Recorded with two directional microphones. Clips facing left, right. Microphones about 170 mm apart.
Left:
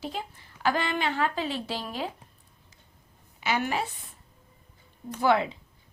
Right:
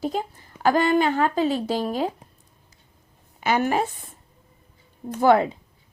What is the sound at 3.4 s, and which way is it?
A woman's voice, 45° right (ahead or behind).